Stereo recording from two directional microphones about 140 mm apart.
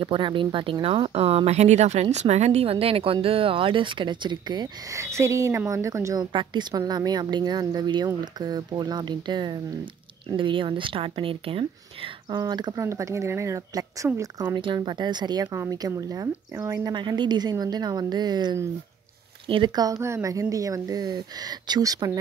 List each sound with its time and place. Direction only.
0.0 s speech: 35° right (ahead or behind)
5.0 s speech: 20° right (ahead or behind)
14.6 s speech: 35° right (ahead or behind)
15.4 s speech: 20° right (ahead or behind)